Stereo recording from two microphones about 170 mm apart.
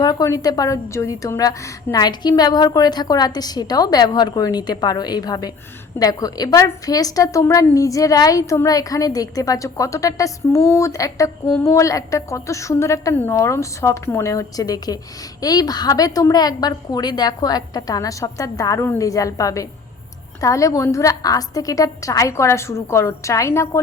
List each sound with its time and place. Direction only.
0.0 s a woman's voice: 20° left (ahead or behind)